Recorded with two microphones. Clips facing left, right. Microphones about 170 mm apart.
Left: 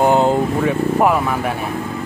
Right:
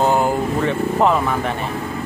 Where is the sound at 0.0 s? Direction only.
20° left (ahead or behind).